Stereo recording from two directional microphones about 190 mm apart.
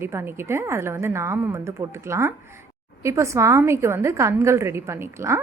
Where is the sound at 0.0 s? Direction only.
15° right (ahead or behind).